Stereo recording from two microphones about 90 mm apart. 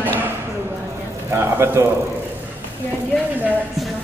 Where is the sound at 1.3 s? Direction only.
25° right (ahead or behind).